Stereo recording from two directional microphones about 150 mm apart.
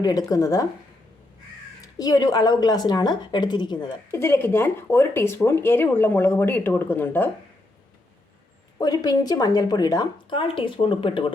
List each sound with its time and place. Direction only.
0.0 s speech: 25° left (ahead or behind)
1.8 s speech: 25° left (ahead or behind)
4.1 s speech: 15° left (ahead or behind)
8.8 s speech: 25° left (ahead or behind)